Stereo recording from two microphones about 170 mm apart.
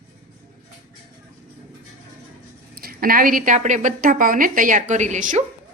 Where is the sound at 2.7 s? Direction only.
60° right (ahead or behind).